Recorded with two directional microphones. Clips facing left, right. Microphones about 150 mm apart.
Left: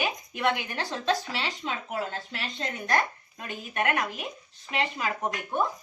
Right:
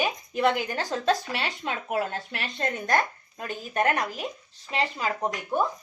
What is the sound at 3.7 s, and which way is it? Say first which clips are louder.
Speech: right 3 dB; 35° right (ahead or behind).